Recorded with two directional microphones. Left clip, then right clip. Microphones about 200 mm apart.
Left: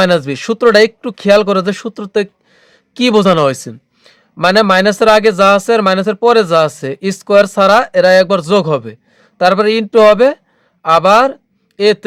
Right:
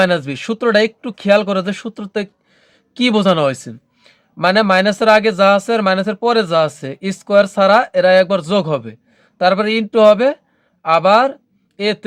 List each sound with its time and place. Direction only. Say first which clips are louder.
0.0 s speech: left 4 dB; 40° left (ahead or behind)